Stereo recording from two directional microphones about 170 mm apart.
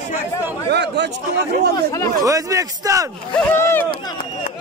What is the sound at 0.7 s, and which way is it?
Speech, 90° right.